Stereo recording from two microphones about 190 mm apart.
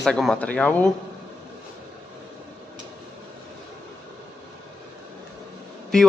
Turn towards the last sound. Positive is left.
turn(degrees=5)  # may be behind; listen again after turning